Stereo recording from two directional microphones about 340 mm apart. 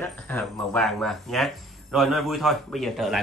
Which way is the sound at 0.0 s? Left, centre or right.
Centre.